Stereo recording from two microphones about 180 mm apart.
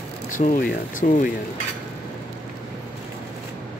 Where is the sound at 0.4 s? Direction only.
55° left (ahead or behind).